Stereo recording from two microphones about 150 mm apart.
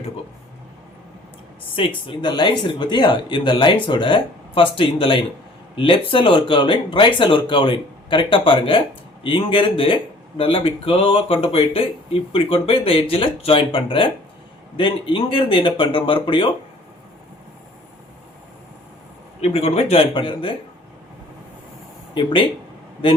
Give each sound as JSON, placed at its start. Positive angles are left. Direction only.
{"t": 2.0, "sound": "speech", "side_deg": 30}
{"t": 19.4, "sound": "speech", "side_deg": 40}
{"t": 22.1, "sound": "speech", "side_deg": 30}